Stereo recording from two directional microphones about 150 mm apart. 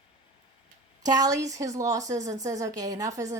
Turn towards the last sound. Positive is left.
turn(degrees=-20)  # may be behind; listen again after turning